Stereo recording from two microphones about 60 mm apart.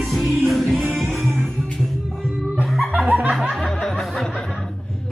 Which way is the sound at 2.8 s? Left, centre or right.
Right.